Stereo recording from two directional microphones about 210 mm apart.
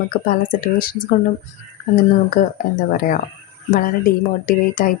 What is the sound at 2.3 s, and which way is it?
Speech, 45° left (ahead or behind).